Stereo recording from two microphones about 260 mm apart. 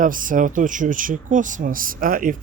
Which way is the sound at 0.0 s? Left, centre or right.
Right.